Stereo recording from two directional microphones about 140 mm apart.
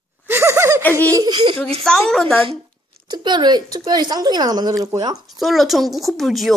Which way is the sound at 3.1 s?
30° right (ahead or behind).